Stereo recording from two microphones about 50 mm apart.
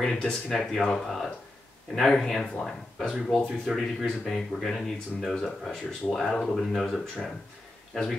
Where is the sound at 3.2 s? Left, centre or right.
Centre.